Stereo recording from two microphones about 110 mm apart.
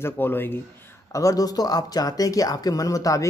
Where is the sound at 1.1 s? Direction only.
30° left (ahead or behind).